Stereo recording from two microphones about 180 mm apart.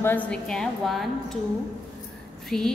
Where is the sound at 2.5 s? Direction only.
5° left (ahead or behind).